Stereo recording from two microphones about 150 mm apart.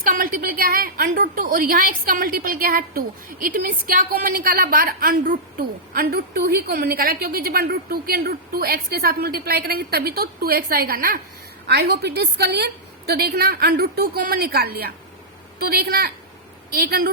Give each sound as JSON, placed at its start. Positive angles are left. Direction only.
{"t": 0.0, "sound": "a woman's voice", "side_deg": -65}
{"t": 11.7, "sound": "a woman's voice", "side_deg": -90}